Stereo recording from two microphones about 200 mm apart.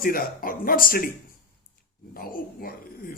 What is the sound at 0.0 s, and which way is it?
Speech, 45° left (ahead or behind).